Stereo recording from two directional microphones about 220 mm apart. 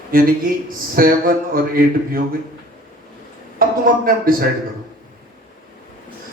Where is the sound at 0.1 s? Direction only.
40° right (ahead or behind).